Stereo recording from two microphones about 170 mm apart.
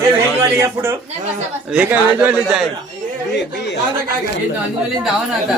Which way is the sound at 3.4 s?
90° left.